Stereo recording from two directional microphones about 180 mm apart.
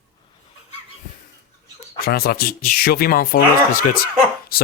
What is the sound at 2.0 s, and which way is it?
Speech, 60° left (ahead or behind).